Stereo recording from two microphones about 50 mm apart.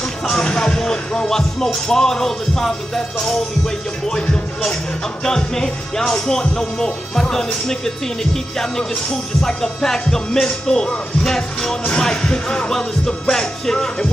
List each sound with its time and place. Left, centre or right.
0.3 s speech: centre